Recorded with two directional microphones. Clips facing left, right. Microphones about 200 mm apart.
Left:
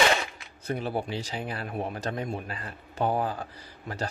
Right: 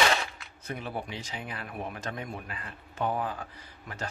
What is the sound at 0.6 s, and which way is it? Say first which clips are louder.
Speech: left 6 dB; 35° left (ahead or behind).